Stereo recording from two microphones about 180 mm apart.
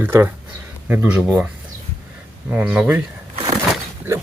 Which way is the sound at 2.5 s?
10° right (ahead or behind).